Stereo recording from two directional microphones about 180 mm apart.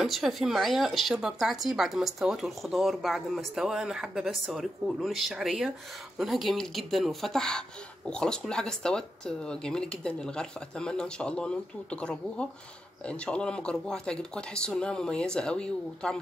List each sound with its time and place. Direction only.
0.0 s speech: centre (ahead or behind)